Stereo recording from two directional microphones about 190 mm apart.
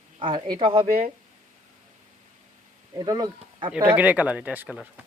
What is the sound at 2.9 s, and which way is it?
Speech, 20° right (ahead or behind).